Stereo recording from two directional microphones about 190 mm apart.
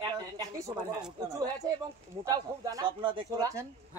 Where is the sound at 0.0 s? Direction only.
20° right (ahead or behind).